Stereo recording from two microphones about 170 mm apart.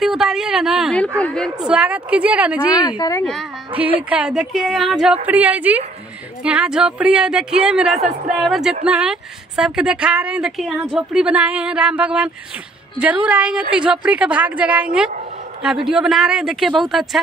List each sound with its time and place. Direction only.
0.0 s a woman's voice: 5° right (ahead or behind)
3.0 s a woman's voice: 20° left (ahead or behind)
4.1 s a woman's voice: 5° right (ahead or behind)